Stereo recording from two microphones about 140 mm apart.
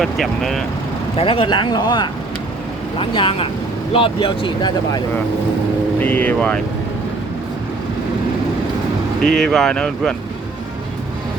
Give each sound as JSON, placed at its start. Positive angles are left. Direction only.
{"t": 0.0, "sound": "speech", "side_deg": 0}
{"t": 1.1, "sound": "speech", "side_deg": 40}
{"t": 6.0, "sound": "speech", "side_deg": 10}
{"t": 9.2, "sound": "speech", "side_deg": 5}